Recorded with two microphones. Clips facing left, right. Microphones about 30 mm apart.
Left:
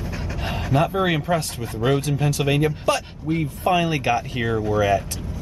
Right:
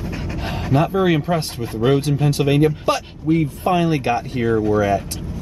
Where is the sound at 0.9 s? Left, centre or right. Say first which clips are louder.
Right 4 dB; left.